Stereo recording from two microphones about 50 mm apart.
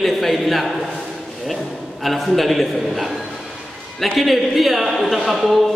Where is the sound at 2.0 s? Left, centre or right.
Centre.